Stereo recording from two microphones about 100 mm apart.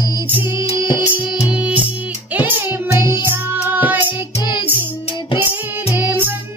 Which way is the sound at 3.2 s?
20° right (ahead or behind).